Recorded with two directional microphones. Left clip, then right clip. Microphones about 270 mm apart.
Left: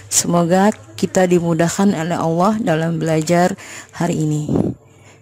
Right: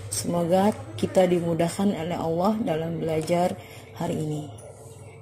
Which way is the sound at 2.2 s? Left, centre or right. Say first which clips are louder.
Left 8 dB; left.